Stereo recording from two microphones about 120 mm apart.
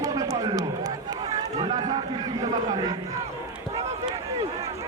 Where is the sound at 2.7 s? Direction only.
35° right (ahead or behind).